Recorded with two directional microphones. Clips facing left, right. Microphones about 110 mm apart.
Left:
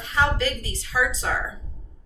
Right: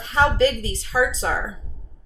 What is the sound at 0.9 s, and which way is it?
Speech, 30° right (ahead or behind).